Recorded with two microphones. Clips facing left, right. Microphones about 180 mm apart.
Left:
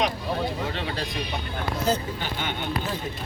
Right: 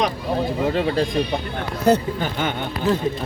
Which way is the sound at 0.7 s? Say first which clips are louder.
Right 10 dB; 40° right (ahead or behind).